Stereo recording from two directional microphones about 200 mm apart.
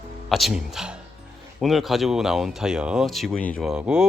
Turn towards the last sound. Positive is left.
turn(degrees=-5)  # may be behind; listen again after turning